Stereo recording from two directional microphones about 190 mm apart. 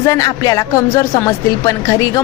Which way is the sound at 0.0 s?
15° left (ahead or behind).